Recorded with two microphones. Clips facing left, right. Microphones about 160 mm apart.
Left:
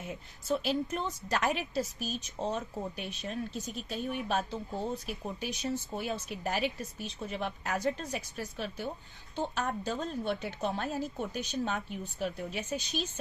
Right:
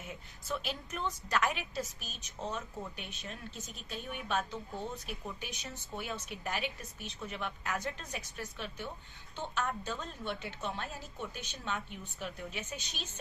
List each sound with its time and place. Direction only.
0.4 s a woman's voice: 35° left (ahead or behind)